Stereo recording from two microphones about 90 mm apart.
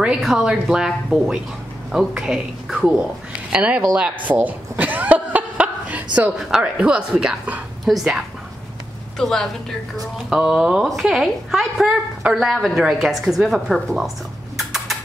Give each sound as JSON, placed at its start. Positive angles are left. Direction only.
{"t": 0.0, "sound": "a woman's voice", "side_deg": -5}
{"t": 4.3, "sound": "cough", "side_deg": -20}
{"t": 6.3, "sound": "a woman's voice", "side_deg": -10}
{"t": 9.2, "sound": "a woman's voice", "side_deg": 5}
{"t": 14.6, "sound": "a sound", "side_deg": 0}